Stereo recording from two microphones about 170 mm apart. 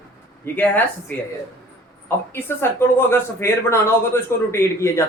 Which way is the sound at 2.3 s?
15° left (ahead or behind).